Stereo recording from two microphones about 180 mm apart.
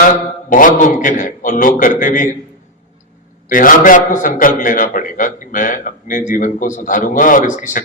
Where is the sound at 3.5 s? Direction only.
50° left (ahead or behind).